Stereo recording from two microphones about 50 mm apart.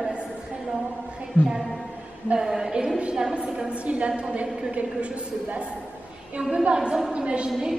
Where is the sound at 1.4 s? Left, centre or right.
Left.